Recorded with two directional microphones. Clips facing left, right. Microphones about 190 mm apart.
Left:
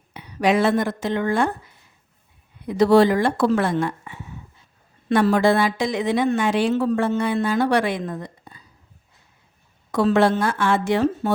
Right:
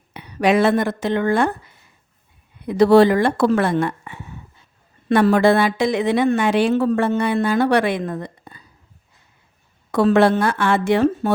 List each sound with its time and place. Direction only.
0.1 s a woman's voice: 65° right (ahead or behind)
2.6 s a woman's voice: 60° right (ahead or behind)
9.9 s a woman's voice: 60° right (ahead or behind)